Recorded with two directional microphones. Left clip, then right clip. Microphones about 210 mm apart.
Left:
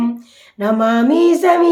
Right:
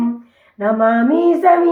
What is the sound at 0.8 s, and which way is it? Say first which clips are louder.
Female singing: right 1 dB; 60° left (ahead or behind).